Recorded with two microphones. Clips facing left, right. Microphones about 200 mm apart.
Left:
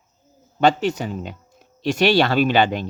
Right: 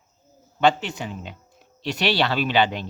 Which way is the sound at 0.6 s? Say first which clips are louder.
Left 3 dB; 40° left (ahead or behind).